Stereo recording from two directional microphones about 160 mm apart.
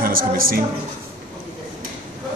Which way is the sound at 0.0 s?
65° right (ahead or behind).